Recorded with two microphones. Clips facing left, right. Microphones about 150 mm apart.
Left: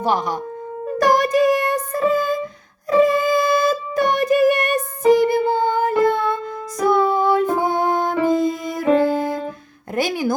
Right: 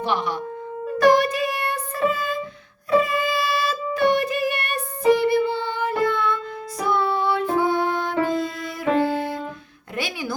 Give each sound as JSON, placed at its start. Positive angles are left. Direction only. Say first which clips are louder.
{"t": 0.0, "sound": "speech", "louder": "left 4 dB", "side_deg": 40}
{"t": 0.9, "sound": "music", "louder": "even", "side_deg": 40}